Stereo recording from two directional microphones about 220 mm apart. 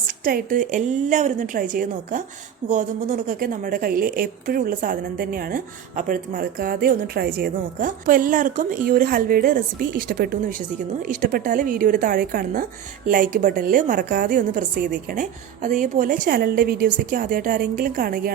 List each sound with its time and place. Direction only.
0.3 s a woman's voice: 40° right (ahead or behind)